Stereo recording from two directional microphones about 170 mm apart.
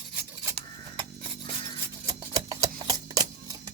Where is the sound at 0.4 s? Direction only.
25° right (ahead or behind).